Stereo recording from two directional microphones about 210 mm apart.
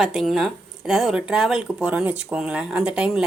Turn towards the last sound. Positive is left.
turn(degrees=-5)  # may be behind; listen again after turning